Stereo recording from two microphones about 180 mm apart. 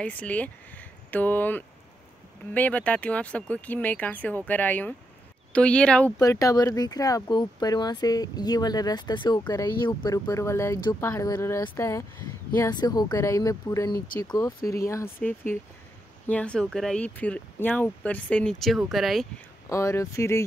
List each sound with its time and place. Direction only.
0.0 s speech: 5° left (ahead or behind)
6.1 s speech: 20° left (ahead or behind); by 19.2 s centre (ahead or behind)
19.7 s speech: 15° left (ahead or behind)